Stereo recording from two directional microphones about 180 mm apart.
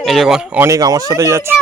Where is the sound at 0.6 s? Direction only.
20° right (ahead or behind).